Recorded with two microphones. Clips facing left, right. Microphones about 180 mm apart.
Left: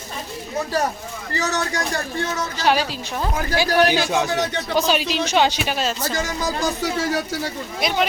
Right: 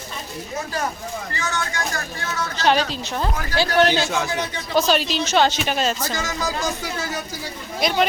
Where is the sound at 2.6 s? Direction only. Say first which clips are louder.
Right 1 dB; 10° left (ahead or behind).